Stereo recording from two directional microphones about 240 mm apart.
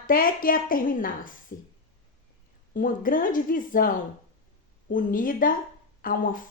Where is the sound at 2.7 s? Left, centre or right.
Left.